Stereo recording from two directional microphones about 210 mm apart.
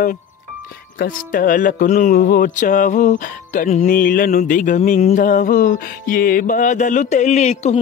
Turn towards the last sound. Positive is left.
turn(degrees=35)  # may be behind; listen again after turning